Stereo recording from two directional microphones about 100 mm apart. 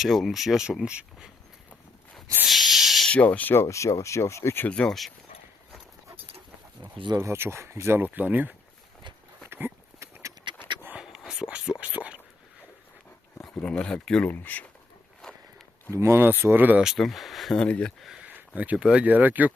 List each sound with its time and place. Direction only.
0.0 s speech: centre (ahead or behind)
2.5 s owl: centre (ahead or behind)
3.1 s speech: 15° left (ahead or behind)
4.7 s speech: 5° left (ahead or behind)
7.2 s speech: 25° right (ahead or behind)
9.5 s horse: 20° right (ahead or behind)
10.5 s a sound: 55° right (ahead or behind)
10.8 s whispering: 10° right (ahead or behind)
11.3 s a sound: 10° right (ahead or behind)
13.4 s speech: 10° left (ahead or behind)
15.9 s speech: 30° right (ahead or behind)
16.8 s speech: centre (ahead or behind)
18.2 s speech: 15° right (ahead or behind)